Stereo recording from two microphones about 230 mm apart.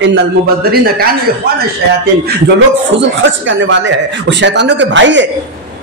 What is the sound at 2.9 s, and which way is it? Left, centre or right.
A man's voice, right.